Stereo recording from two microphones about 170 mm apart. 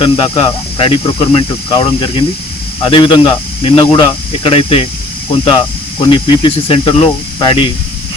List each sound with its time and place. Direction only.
0.0 s speech: 30° left (ahead or behind)